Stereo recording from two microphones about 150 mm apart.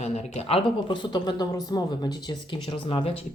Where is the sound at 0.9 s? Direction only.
30° left (ahead or behind).